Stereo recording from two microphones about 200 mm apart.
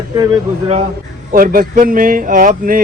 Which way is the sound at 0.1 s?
20° right (ahead or behind).